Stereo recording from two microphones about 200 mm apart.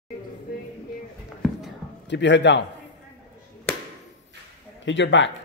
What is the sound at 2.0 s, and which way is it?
Speech, 60° left (ahead or behind).